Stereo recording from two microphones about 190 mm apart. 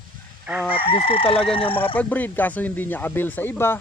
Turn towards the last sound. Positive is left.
turn(degrees=10)  # may be behind; listen again after turning